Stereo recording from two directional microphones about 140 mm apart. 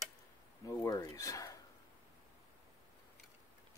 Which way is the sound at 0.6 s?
25° left (ahead or behind).